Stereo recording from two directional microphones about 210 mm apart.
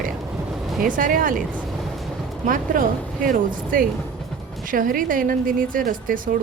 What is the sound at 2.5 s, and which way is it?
A woman's voice, 40° right (ahead or behind).